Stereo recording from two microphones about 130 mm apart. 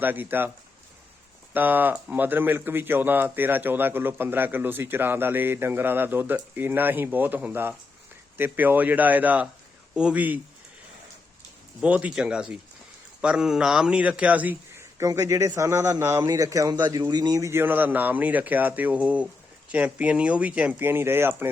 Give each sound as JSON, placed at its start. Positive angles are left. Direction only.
{"t": 0.0, "sound": "speech", "side_deg": -15}
{"t": 1.5, "sound": "speech", "side_deg": -15}
{"t": 11.8, "sound": "speech", "side_deg": -10}